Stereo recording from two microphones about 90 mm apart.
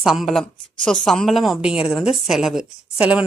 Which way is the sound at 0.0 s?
5° right (ahead or behind).